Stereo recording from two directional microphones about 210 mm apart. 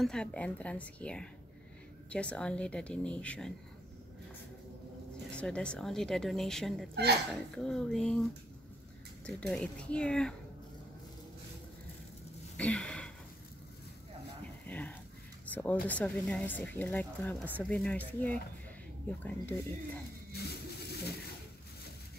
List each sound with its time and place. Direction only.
0.0 s speech: 5° left (ahead or behind)
5.3 s speech: 5° left (ahead or behind)
12.5 s a sound: 5° left (ahead or behind)
14.7 s a sound: 10° left (ahead or behind)
15.5 s speech: 5° left (ahead or behind)
20.3 s vehicle: 50° left (ahead or behind)